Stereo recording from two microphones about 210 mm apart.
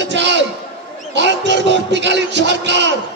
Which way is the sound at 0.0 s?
55° right (ahead or behind).